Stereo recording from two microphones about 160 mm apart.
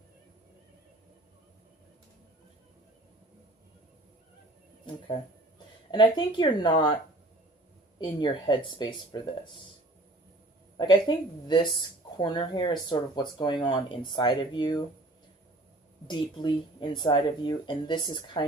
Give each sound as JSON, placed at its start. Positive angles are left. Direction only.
{"t": 5.9, "sound": "speech", "side_deg": 30}
{"t": 10.8, "sound": "a woman's voice", "side_deg": 25}
{"t": 12.1, "sound": "speech", "side_deg": 25}
{"t": 16.0, "sound": "speech", "side_deg": 30}